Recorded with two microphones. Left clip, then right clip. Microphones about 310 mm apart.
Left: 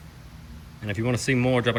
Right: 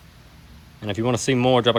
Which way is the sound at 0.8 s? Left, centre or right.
Centre.